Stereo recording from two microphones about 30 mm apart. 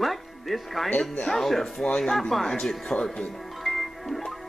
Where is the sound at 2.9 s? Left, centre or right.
Left.